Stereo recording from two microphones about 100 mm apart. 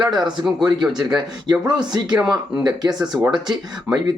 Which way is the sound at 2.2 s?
5° right (ahead or behind).